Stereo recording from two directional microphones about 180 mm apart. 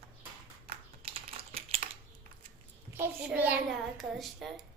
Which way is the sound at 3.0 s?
10° right (ahead or behind).